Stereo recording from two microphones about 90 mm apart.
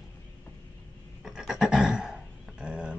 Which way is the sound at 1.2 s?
5° right (ahead or behind).